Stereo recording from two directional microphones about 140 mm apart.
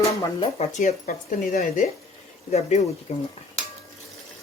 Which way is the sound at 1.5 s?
75° left (ahead or behind).